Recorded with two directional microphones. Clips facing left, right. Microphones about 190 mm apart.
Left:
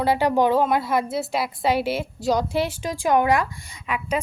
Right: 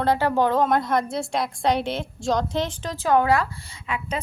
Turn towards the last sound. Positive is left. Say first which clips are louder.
# left 3 dB
turn(degrees=10)  # may be behind; listen again after turning